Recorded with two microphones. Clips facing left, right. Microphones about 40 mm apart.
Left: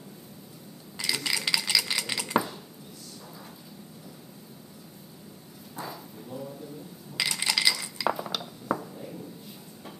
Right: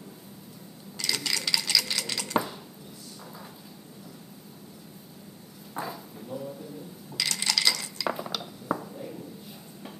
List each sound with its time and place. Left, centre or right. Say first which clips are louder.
0.9 s dishes: left 1 dB; centre
2.3 s dishes: left 1 dB; centre
5.8 s a sound: right 3 dB; centre
7.2 s chink: left 1 dB; centre
8.1 s glass: left 2 dB; centre